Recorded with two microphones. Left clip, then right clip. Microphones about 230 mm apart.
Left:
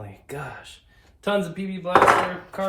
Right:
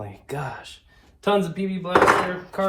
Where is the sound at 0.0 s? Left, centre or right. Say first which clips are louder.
Right 4 dB; centre.